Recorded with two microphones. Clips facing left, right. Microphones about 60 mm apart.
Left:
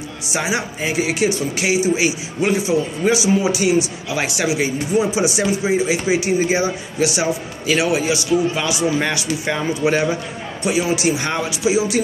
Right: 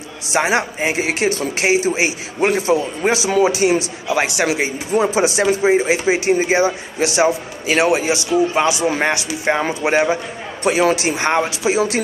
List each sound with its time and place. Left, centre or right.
0.3 s speech: right
4.9 s speech: right
10.6 s speech: right